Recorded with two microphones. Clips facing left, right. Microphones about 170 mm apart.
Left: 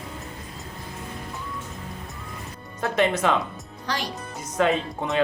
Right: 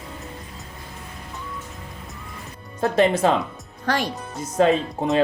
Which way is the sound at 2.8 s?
35° right (ahead or behind).